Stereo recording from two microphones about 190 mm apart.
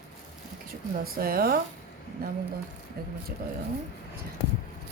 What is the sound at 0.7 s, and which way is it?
A woman's voice, 50° right (ahead or behind).